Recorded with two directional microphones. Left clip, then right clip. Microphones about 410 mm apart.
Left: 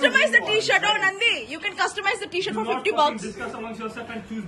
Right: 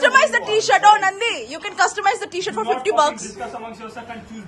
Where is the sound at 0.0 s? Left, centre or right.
Centre.